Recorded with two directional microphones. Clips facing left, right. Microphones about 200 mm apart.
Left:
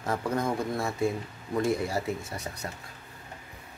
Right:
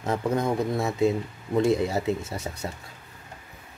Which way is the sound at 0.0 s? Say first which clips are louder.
Right 4 dB; 20° right (ahead or behind).